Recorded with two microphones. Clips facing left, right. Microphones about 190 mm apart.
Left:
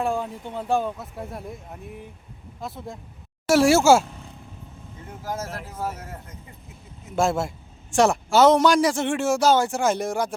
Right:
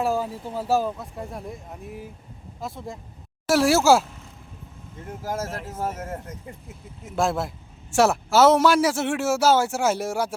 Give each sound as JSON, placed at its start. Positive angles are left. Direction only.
{"t": 0.0, "sound": "a man's voice", "side_deg": -5}
{"t": 5.2, "sound": "speech", "side_deg": -45}
{"t": 7.2, "sound": "a man's voice", "side_deg": 0}